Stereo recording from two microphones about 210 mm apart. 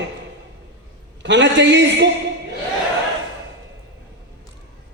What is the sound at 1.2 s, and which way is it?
Speech, 60° right (ahead or behind).